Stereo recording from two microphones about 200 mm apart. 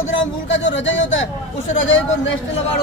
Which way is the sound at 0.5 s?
65° left (ahead or behind).